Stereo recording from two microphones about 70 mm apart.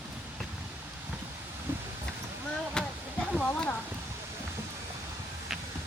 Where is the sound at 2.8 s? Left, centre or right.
Centre.